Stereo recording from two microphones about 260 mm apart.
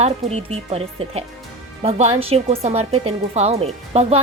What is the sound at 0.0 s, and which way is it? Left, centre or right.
Speech, right.